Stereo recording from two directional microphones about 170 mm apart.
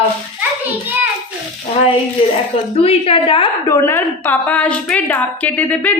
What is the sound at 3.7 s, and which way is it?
A woman's voice, 15° left (ahead or behind).